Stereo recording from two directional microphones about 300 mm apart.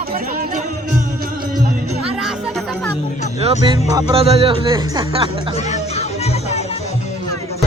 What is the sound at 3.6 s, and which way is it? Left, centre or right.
Speech, centre.